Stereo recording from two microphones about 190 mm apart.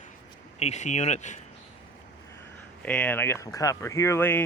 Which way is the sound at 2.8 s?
10° left (ahead or behind).